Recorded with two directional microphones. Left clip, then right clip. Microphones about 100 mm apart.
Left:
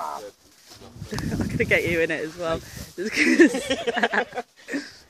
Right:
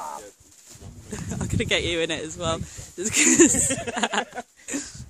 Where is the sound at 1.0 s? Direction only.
40° right (ahead or behind).